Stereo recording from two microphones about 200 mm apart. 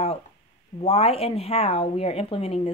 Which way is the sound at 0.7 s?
30° left (ahead or behind).